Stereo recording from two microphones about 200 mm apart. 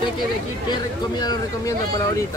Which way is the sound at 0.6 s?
20° left (ahead or behind).